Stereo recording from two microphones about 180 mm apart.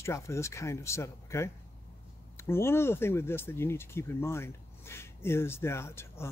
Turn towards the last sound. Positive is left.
turn(degrees=15)  # may be behind; listen again after turning